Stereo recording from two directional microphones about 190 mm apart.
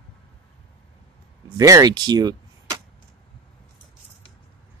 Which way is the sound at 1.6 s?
20° right (ahead or behind).